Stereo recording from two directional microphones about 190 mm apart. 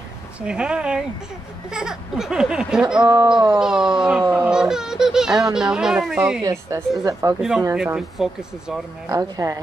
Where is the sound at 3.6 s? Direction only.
5° right (ahead or behind).